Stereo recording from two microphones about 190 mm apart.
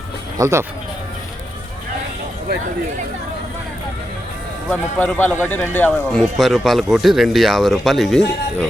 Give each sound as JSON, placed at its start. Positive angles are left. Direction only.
{"t": 0.3, "sound": "speech", "side_deg": -15}
{"t": 4.7, "sound": "a man's voice", "side_deg": 5}